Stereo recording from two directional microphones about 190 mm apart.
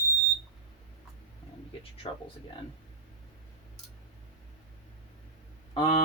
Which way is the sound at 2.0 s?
30° left (ahead or behind).